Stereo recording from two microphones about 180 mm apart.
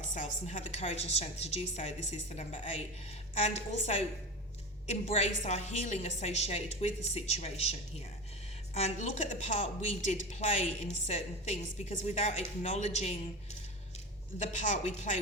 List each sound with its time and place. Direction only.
0.4 s a woman's voice: 40° left (ahead or behind)
14.3 s a woman's voice: 40° left (ahead or behind)